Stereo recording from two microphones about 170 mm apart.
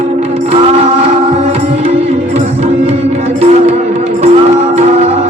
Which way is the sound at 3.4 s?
40° right (ahead or behind).